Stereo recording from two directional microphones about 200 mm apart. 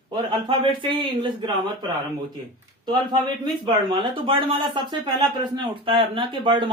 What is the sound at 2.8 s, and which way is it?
Speech, 20° right (ahead or behind).